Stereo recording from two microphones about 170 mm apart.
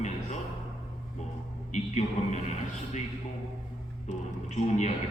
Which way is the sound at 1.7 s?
45° left (ahead or behind).